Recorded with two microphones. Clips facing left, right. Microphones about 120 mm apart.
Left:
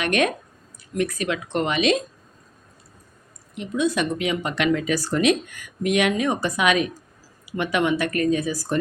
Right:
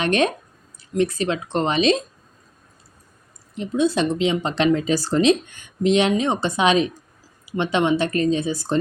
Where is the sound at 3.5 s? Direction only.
30° right (ahead or behind).